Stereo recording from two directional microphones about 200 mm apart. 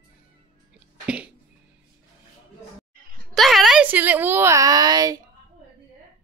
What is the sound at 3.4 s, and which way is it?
A woman's voice, centre (ahead or behind).